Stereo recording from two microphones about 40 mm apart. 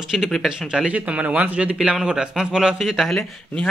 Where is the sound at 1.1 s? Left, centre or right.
Right.